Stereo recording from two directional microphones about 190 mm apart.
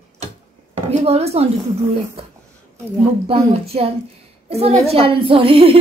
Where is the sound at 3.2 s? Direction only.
30° right (ahead or behind).